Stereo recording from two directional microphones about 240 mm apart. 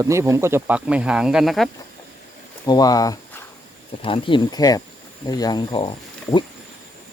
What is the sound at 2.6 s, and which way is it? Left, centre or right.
Speech, centre.